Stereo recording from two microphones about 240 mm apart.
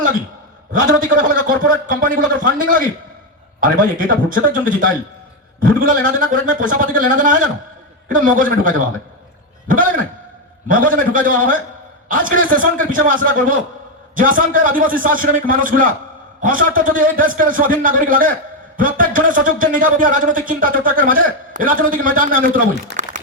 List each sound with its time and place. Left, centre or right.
0.7 s speech: right